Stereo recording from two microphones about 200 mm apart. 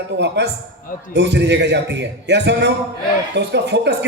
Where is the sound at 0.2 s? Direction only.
60° right (ahead or behind).